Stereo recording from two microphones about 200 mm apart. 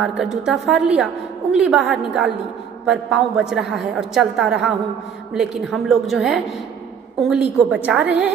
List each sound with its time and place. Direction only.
0.2 s a woman's voice: centre (ahead or behind)